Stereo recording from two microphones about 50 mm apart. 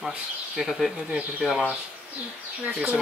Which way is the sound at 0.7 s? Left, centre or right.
Centre.